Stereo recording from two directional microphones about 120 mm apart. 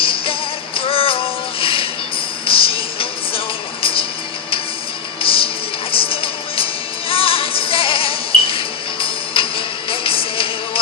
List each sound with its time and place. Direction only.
0.0 s music: 50° left (ahead or behind)
5.2 s music: 50° left (ahead or behind)